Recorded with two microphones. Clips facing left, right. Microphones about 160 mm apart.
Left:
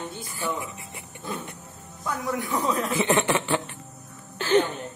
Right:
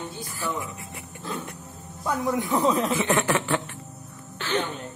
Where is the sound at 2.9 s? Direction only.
30° left (ahead or behind).